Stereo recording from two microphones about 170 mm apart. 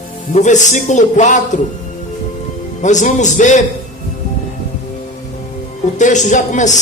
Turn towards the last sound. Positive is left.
turn(degrees=45)  # may be behind; listen again after turning